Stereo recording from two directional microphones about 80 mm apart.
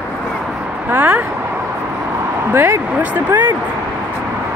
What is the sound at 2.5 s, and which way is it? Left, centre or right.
Speech, right.